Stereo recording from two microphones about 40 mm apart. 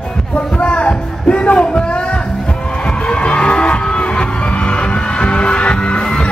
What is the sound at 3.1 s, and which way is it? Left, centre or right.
Music, left.